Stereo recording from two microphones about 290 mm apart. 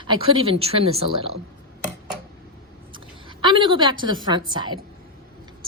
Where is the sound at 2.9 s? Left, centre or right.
Centre.